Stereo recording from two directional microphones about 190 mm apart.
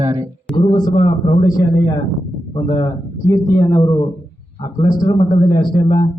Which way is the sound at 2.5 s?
25° left (ahead or behind).